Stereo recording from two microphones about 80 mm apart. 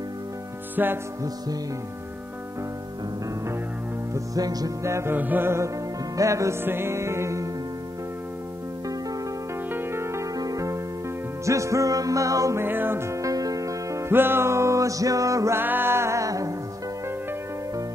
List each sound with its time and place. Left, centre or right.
0.8 s music: right
4.1 s music: right
4.8 s music: right
5.1 s music: right
6.6 s music: right
9.7 s music: right
10.3 s music: right
12.6 s music: right
13.2 s music: right
15.6 s music: right